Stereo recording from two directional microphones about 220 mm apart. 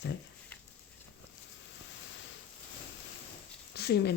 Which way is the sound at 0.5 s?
5° left (ahead or behind).